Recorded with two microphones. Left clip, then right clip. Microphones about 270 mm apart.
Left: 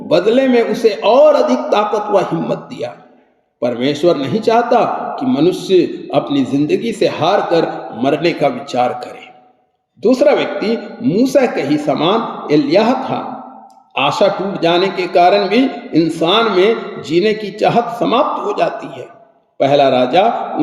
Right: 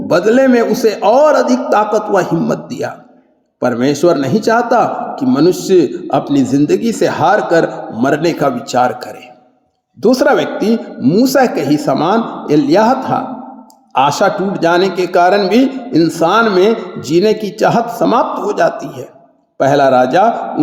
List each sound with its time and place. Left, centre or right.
0.3 s a man's voice: right
14.2 s a man's voice: right